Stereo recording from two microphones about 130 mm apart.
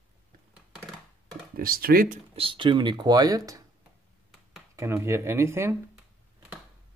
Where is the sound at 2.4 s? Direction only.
40° right (ahead or behind).